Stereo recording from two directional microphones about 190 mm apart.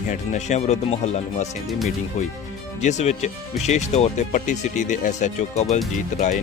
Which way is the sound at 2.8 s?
40° left (ahead or behind).